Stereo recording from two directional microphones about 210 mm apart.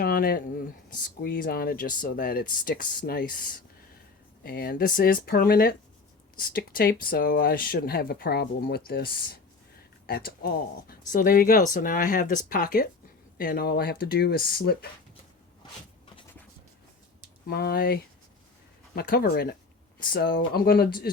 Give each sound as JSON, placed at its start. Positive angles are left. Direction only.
{"t": 0.0, "sound": "a sound", "side_deg": 45}
{"t": 1.2, "sound": "speech", "side_deg": 45}
{"t": 4.4, "sound": "speech", "side_deg": 45}
{"t": 17.5, "sound": "speech", "side_deg": 50}